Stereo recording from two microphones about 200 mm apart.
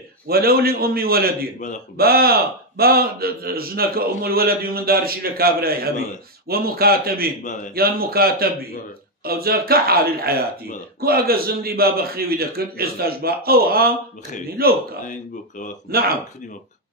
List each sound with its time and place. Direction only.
0.3 s a man's voice: 50° right (ahead or behind)
7.4 s a man's voice: 40° left (ahead or behind)
7.7 s a man's voice: 50° right (ahead or behind)
15.9 s a man's voice: 50° right (ahead or behind)